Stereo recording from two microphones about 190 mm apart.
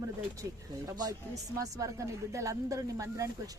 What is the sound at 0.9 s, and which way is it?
Speech, 20° right (ahead or behind).